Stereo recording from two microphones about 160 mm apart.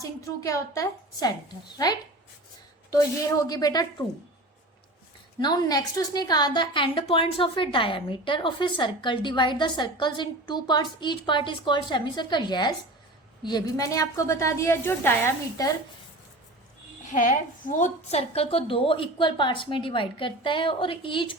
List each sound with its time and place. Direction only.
0.0 s a woman's voice: 20° left (ahead or behind)
2.9 s a woman's voice: 20° left (ahead or behind)
5.4 s a woman's voice: 25° left (ahead or behind)
17.1 s a woman's voice: 55° left (ahead or behind); by 21.3 s 30° left (ahead or behind)